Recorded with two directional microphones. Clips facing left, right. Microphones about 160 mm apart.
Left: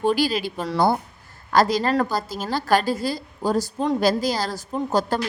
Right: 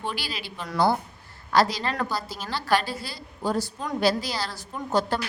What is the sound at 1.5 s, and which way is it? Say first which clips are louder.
A woman's voice: left 4 dB; 45° left (ahead or behind).